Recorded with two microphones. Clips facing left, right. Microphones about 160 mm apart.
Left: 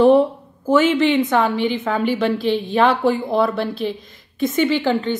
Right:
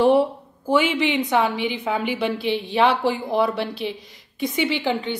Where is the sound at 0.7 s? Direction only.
10° right (ahead or behind).